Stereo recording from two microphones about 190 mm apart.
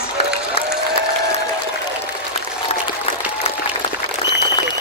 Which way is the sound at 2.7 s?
30° left (ahead or behind).